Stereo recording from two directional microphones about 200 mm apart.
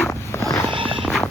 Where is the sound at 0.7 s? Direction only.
25° right (ahead or behind).